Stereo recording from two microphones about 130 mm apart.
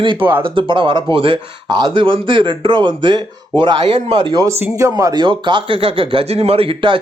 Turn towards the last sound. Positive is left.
turn(degrees=-40)  # may be behind; listen again after turning